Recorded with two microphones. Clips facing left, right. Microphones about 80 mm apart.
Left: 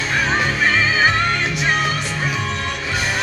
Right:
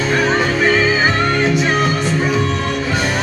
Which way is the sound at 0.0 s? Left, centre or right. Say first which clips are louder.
Right 4 dB; right.